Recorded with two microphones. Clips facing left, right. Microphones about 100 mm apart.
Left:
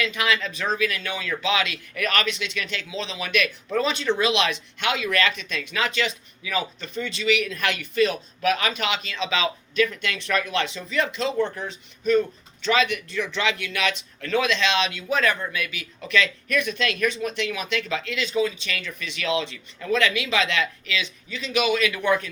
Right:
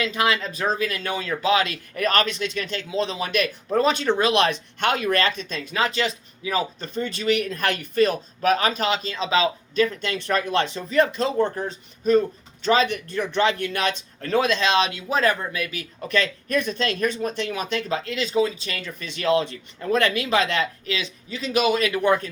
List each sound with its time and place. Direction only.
0.0 s speech: 35° right (ahead or behind)
3.2 s speech: 35° right (ahead or behind)